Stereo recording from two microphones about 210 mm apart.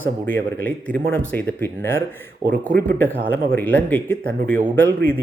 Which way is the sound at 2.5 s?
45° right (ahead or behind).